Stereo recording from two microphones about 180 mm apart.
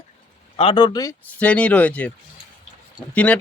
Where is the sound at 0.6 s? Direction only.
25° left (ahead or behind).